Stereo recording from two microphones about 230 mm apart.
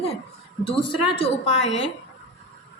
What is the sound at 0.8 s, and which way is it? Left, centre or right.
Speech, left.